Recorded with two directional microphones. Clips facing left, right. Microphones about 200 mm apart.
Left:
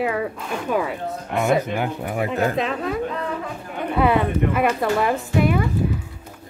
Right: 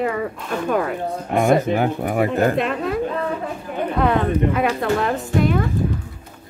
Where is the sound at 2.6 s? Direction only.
Centre (ahead or behind).